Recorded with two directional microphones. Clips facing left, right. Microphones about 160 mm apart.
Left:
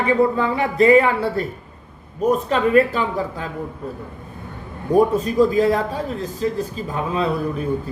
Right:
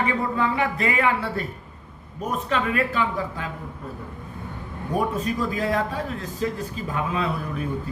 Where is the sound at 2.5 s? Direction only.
35° left (ahead or behind).